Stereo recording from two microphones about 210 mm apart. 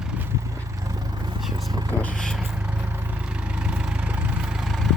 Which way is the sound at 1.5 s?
20° right (ahead or behind).